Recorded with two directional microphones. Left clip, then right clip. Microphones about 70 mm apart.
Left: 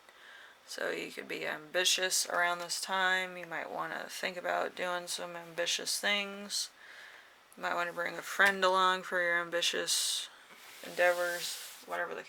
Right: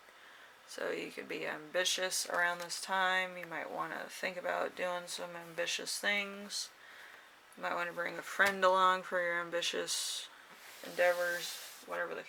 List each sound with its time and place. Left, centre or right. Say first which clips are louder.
0.7 s speech: left 2 dB; left
11.1 s speech: left 1 dB; centre
11.9 s speech: left 2 dB; left